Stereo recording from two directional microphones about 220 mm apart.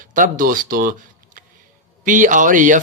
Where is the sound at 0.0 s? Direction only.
35° right (ahead or behind).